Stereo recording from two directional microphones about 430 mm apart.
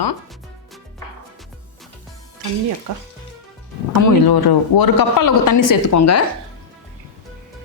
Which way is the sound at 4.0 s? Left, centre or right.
Left.